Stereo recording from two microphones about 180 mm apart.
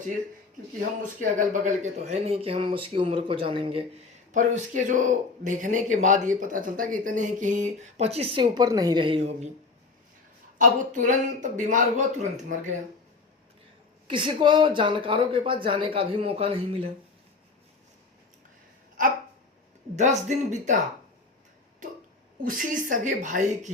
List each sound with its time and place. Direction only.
0.8 s speech: 45° right (ahead or behind); by 3.8 s 30° right (ahead or behind)
4.3 s speech: 45° right (ahead or behind)
10.6 s speech: 45° right (ahead or behind)
14.1 s speech: 25° right (ahead or behind)
20.0 s speech: 40° right (ahead or behind)
22.4 s speech: 50° right (ahead or behind)